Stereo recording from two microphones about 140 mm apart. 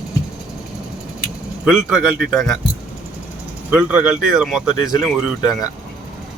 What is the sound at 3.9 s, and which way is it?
Speech, 5° right (ahead or behind).